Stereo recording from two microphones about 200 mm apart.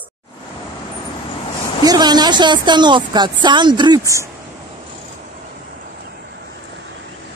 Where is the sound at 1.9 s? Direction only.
20° right (ahead or behind).